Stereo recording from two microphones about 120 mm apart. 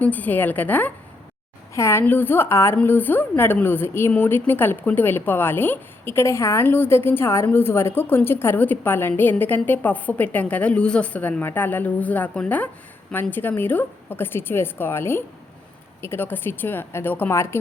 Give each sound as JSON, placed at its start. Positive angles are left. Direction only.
{"t": 0.0, "sound": "a woman's voice", "side_deg": 15}